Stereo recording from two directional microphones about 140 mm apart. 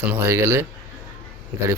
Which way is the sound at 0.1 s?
15° right (ahead or behind).